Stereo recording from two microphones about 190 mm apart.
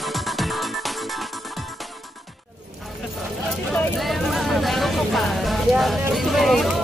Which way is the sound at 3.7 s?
Centre (ahead or behind).